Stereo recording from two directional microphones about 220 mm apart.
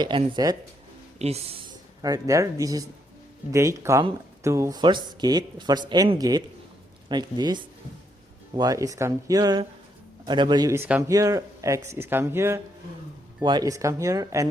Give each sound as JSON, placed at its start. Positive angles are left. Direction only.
{"t": 0.0, "sound": "speech", "side_deg": -20}